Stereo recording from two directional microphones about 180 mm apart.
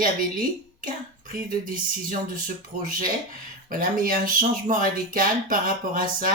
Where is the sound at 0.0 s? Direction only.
50° right (ahead or behind).